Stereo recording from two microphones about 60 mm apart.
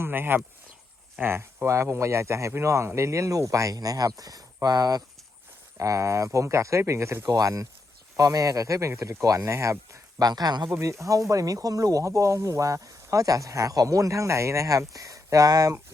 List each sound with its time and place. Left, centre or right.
0.0 s speech: right
5.7 s speech: right
7.3 s speech: right
8.9 s speech: right
10.7 s speech: right